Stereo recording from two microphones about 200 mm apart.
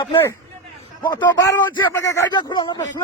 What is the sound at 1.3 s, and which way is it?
Speech, 20° left (ahead or behind).